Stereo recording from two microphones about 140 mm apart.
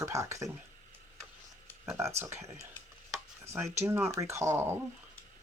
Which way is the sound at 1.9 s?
20° right (ahead or behind).